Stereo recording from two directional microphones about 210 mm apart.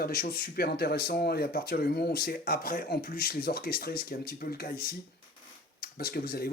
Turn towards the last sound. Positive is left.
turn(degrees=45)  # may be behind; listen again after turning